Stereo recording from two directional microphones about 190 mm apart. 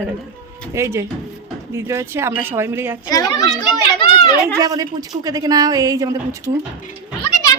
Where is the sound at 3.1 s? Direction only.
20° left (ahead or behind).